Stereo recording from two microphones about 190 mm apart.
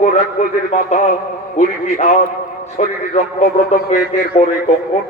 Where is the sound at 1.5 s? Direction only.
40° left (ahead or behind).